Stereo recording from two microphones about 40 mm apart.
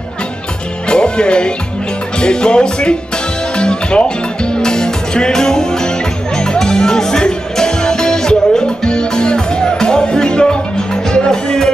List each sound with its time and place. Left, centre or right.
0.8 s music: left